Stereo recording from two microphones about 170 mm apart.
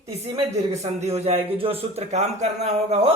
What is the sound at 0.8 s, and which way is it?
A man's voice, 40° right (ahead or behind).